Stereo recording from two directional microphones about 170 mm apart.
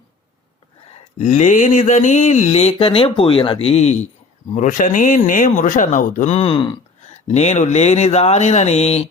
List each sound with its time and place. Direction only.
1.2 s speech: 45° left (ahead or behind)